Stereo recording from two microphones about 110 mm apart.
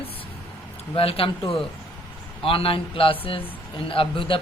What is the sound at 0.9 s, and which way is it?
Speech, 60° left (ahead or behind).